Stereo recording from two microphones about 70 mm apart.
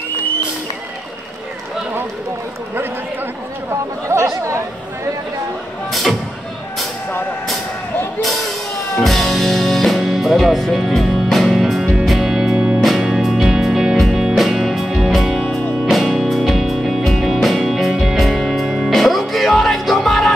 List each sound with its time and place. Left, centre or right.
4.4 s chatter: right
5.9 s music: centre
9.0 s music: centre
12.5 s music: centre
12.8 s music: centre